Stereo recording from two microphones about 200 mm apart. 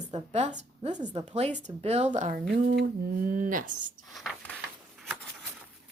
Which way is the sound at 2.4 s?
50° right (ahead or behind).